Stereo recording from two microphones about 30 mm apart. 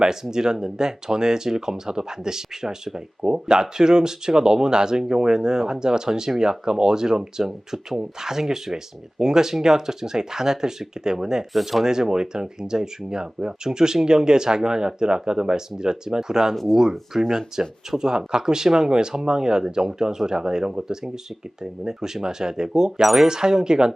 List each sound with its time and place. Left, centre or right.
0.0 s speech: centre
11.6 s speech: centre
11.9 s speech: right
17.3 s speech: right